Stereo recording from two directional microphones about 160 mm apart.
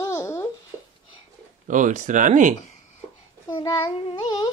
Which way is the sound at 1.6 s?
50° right (ahead or behind).